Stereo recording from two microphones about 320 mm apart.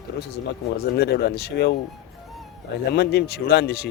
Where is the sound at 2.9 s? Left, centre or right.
Left.